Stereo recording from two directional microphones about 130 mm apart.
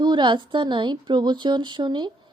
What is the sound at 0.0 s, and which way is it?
A woman's voice, 35° right (ahead or behind).